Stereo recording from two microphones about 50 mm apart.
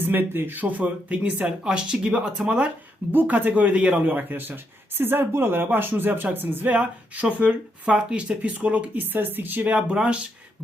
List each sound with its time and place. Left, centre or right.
0.0 s speech: right
3.1 s speech: right
6.7 s speech: right
9.1 s speech: right